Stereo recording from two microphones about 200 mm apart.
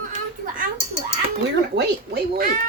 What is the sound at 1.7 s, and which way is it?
Speech, 55° right (ahead or behind).